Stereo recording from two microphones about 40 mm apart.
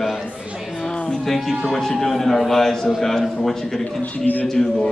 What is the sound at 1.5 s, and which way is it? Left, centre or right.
A man's voice, centre.